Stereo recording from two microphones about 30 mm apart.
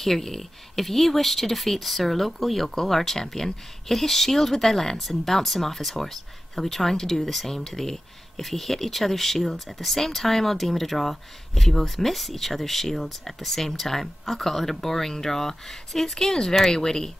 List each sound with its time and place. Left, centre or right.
0.0 s speech: centre